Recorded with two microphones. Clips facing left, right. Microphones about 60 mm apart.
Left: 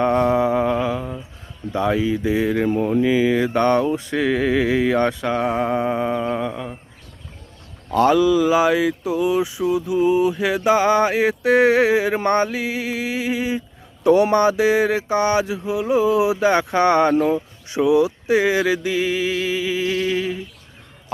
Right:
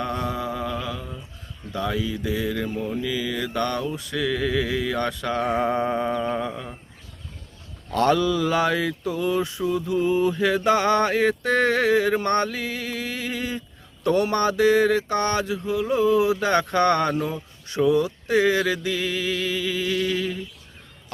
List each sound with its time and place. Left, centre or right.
0.0 s mantra: left
2.7 s speech: left
3.0 s mantra: left; by 6.7 s centre
7.9 s speech: centre
17.2 s speech: left
17.7 s speech: centre